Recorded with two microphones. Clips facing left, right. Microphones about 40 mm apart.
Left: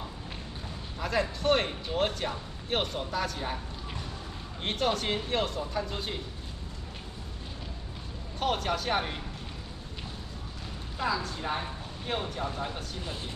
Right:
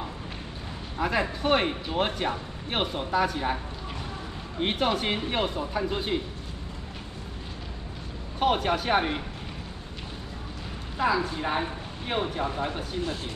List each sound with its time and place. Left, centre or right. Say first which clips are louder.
0.9 s speech: right 3 dB; right
8.4 s speech: right 5 dB; centre
11.0 s speech: right 6 dB; right